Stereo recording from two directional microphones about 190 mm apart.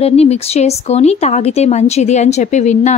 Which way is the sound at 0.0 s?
35° left (ahead or behind).